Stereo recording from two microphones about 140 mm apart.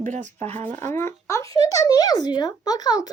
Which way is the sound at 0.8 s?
15° left (ahead or behind).